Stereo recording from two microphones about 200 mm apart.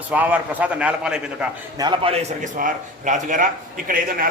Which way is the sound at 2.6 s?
40° right (ahead or behind).